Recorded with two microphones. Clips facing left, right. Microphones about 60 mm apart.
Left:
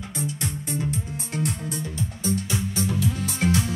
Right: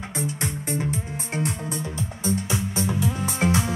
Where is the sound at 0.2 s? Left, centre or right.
Right.